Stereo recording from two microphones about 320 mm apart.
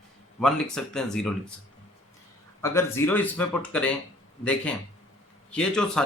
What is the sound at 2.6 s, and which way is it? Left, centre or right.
Speech, centre.